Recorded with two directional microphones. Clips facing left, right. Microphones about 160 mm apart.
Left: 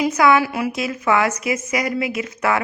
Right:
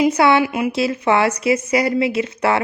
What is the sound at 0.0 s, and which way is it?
A woman's voice, 30° right (ahead or behind).